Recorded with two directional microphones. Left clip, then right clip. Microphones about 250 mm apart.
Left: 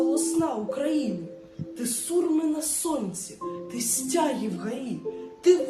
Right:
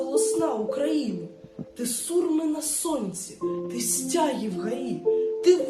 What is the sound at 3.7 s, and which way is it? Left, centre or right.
A woman's voice, centre.